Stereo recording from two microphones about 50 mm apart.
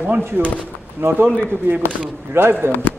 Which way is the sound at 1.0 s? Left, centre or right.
Right.